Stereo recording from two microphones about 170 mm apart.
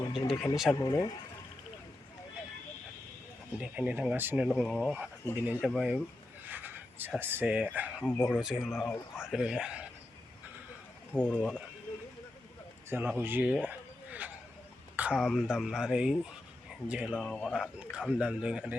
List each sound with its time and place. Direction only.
0.3 s speech: centre (ahead or behind)
0.7 s speech: 20° left (ahead or behind)
3.6 s speech: 10° right (ahead or behind)
4.4 s speech: centre (ahead or behind)
5.4 s speech: 10° right (ahead or behind)
6.4 s a sound: 10° right (ahead or behind)
7.2 s speech: 10° right (ahead or behind)
8.0 s speech: 10° left (ahead or behind)
8.4 s speech: 5° right (ahead or behind)
11.1 s speech: 5° left (ahead or behind)
12.9 s speech: 10° right (ahead or behind)
13.7 s a sound: 10° right (ahead or behind)
14.9 s speech: 5° right (ahead or behind)
17.1 s speech: 5° left (ahead or behind)